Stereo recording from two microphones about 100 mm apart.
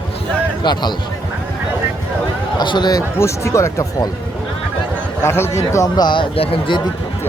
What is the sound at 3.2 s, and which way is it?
Speech, 30° left (ahead or behind).